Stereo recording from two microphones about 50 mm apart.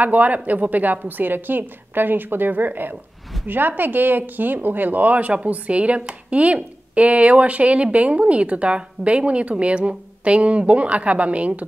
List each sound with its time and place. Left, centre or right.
0.0 s a woman's voice: right